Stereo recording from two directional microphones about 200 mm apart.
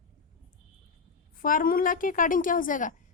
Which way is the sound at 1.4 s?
45° left (ahead or behind).